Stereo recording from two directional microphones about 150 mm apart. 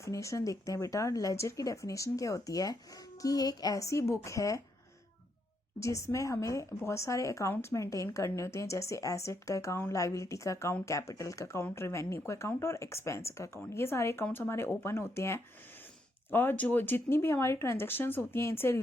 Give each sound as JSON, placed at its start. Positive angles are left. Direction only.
{"t": 0.0, "sound": "speech", "side_deg": 20}
{"t": 5.8, "sound": "speech", "side_deg": 20}